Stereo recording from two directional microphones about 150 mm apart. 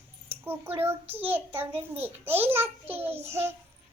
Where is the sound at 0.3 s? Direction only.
15° right (ahead or behind).